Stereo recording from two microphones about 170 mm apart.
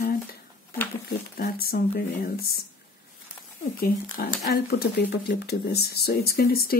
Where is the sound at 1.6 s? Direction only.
60° left (ahead or behind).